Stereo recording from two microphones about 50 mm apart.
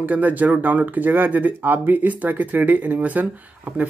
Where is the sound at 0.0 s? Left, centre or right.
Right.